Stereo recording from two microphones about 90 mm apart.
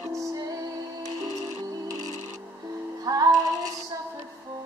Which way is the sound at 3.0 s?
45° right (ahead or behind).